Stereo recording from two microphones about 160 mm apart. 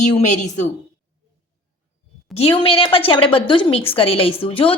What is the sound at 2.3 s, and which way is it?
A woman's voice, 35° left (ahead or behind).